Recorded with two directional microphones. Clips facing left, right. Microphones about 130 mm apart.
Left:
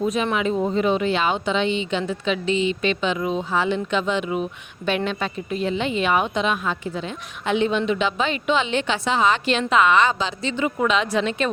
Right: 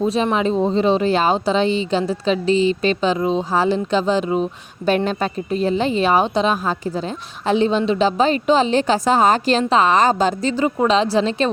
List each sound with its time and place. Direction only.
0.0 s a woman's voice: 30° right (ahead or behind)